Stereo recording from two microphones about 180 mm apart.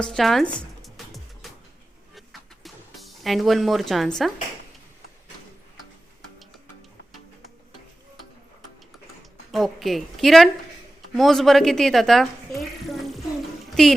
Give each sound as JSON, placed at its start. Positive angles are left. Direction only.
{"t": 0.0, "sound": "a woman's voice", "side_deg": 0}
{"t": 0.8, "sound": "music", "side_deg": 0}
{"t": 2.6, "sound": "speech", "side_deg": 0}
{"t": 9.5, "sound": "a woman's voice", "side_deg": 0}